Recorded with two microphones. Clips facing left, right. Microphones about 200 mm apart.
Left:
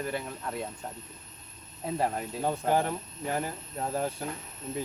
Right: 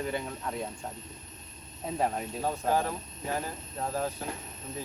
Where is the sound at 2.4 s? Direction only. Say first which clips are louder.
Left 2 dB; 20° left (ahead or behind).